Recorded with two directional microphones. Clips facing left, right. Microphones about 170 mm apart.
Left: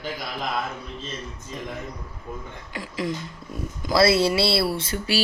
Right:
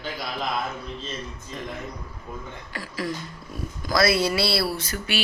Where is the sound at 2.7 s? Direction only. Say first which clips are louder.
Left 2 dB; 20° left (ahead or behind).